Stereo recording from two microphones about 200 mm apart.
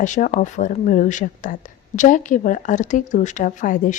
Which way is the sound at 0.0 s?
40° left (ahead or behind).